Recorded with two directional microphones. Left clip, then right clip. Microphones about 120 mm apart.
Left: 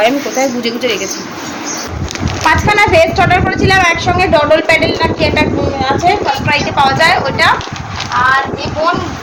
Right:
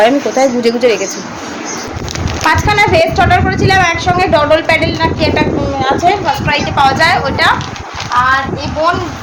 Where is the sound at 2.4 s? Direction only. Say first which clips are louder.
Left 1 dB; 15° right (ahead or behind).